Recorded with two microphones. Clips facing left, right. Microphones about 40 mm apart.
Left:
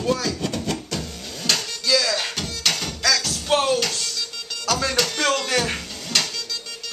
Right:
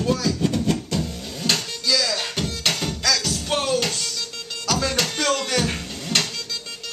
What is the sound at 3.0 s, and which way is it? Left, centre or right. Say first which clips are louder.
Music: left 3 dB; centre.